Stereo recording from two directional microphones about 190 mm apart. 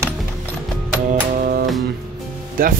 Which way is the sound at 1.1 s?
50° right (ahead or behind).